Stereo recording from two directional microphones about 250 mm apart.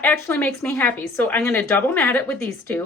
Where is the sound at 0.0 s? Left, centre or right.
Centre.